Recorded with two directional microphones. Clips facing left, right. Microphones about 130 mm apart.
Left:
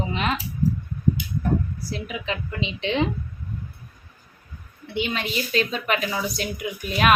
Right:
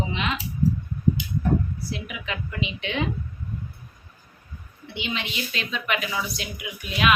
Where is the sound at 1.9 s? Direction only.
30° left (ahead or behind).